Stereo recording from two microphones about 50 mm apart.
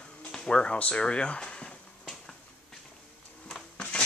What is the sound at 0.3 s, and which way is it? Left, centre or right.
Speech, centre.